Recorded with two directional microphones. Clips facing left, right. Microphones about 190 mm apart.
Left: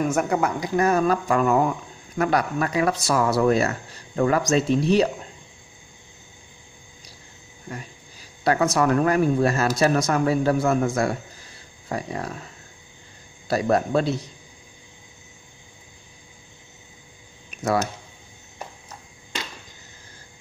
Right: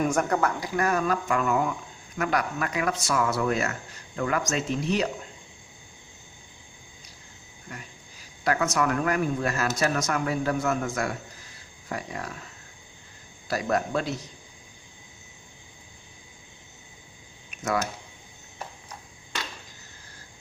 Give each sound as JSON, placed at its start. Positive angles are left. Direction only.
{"t": 0.0, "sound": "speech", "side_deg": 5}
{"t": 0.4, "sound": "speech", "side_deg": 20}
{"t": 8.5, "sound": "speech", "side_deg": 35}
{"t": 13.5, "sound": "speech", "side_deg": 30}